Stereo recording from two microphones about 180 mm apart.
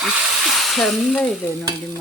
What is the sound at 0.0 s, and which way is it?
Speech, centre (ahead or behind).